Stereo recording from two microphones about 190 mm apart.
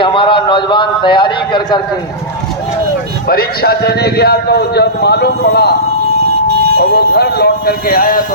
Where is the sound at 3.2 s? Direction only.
55° left (ahead or behind).